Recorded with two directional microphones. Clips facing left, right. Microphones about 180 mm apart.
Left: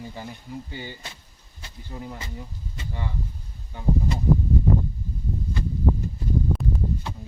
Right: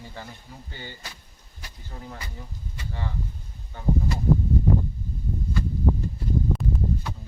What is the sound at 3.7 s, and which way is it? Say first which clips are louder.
Speech: left 1 dB; 15° left (ahead or behind).